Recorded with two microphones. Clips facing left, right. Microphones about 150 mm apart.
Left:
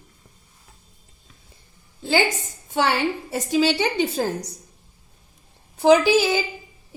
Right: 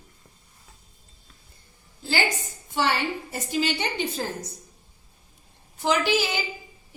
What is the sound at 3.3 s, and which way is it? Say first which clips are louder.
Speech: left 8 dB; 90° left.